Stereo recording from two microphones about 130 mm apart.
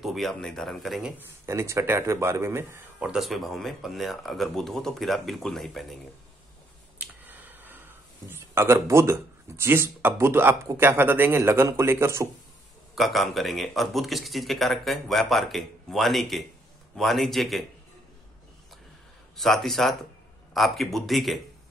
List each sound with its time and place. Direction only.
0.0 s speech: centre (ahead or behind)
1.4 s speech: 20° right (ahead or behind)
3.1 s speech: centre (ahead or behind)
7.0 s finger snapping: 15° right (ahead or behind)
8.3 s speech: 20° right (ahead or behind)
12.9 s speech: centre (ahead or behind)
19.3 s speech: centre (ahead or behind)